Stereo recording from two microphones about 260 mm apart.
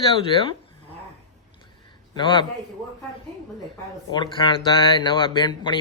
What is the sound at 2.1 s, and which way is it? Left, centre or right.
Speech, centre.